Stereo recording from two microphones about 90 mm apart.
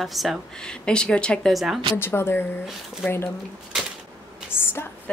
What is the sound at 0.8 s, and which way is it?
Speech, 10° left (ahead or behind).